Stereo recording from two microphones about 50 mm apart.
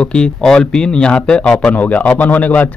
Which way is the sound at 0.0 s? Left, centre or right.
Centre.